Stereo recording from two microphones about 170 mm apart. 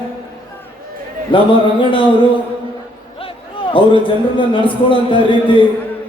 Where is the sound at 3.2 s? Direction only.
30° left (ahead or behind).